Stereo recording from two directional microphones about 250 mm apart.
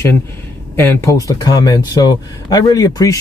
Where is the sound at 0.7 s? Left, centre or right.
Centre.